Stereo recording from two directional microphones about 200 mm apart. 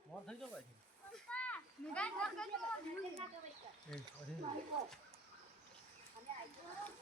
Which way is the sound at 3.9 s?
Centre (ahead or behind).